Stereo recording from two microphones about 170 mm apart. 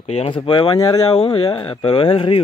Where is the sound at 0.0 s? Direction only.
40° left (ahead or behind).